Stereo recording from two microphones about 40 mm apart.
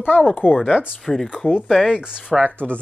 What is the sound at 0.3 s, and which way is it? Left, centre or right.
Speech, left.